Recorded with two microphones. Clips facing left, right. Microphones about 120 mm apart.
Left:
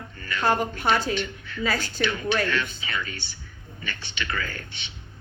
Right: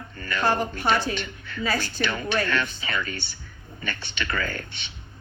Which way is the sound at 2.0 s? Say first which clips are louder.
Left 1 dB; 45° right (ahead or behind).